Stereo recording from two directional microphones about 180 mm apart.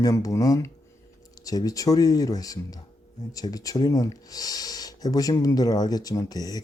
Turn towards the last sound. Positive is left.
turn(degrees=20)  # may be behind; listen again after turning